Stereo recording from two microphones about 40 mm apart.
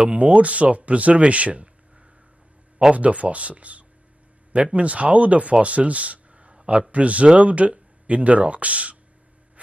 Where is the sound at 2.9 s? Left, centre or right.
Right.